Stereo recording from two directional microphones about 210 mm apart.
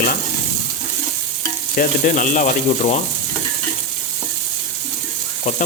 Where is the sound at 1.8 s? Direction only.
40° left (ahead or behind).